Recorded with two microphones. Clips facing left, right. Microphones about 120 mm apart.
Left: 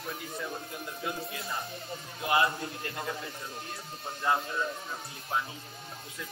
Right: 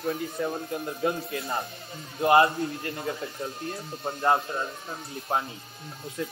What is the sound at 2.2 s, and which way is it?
Speech, 60° right (ahead or behind).